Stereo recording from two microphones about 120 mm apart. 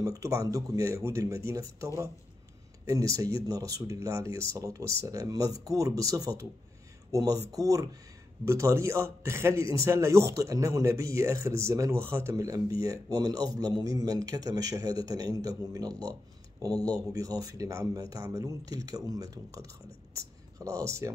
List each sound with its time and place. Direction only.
0.0 s a man's voice: 30° right (ahead or behind)